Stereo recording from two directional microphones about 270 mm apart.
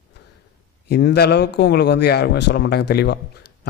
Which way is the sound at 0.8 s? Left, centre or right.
Left.